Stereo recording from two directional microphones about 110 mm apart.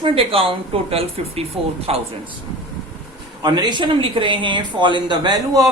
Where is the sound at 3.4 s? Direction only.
40° right (ahead or behind).